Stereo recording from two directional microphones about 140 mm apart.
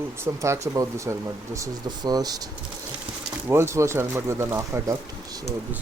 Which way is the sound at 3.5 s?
20° right (ahead or behind).